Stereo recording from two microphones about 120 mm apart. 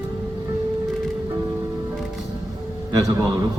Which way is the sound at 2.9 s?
35° right (ahead or behind).